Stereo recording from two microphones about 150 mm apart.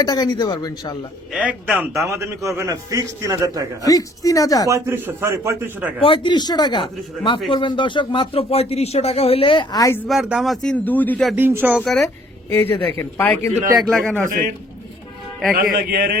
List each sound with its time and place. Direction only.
0.0 s a man's voice: 30° left (ahead or behind)
1.3 s a man's voice: 10° right (ahead or behind)
3.8 s a man's voice: 25° left (ahead or behind)
4.7 s a man's voice: 15° right (ahead or behind)
6.0 s a man's voice: 35° left (ahead or behind)
9.8 s speech: 15° left (ahead or behind)
10.1 s a man's voice: centre (ahead or behind)
11.3 s a man's voice: 15° right (ahead or behind)
11.8 s a man's voice: 5° left (ahead or behind)
13.8 s a man's voice: 5° left (ahead or behind)
15.5 s a man's voice: 70° right (ahead or behind)